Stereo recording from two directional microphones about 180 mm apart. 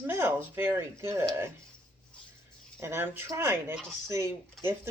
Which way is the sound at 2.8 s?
15° right (ahead or behind).